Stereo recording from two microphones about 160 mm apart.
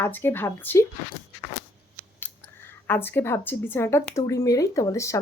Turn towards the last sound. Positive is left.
turn(degrees=20)  # may be behind; listen again after turning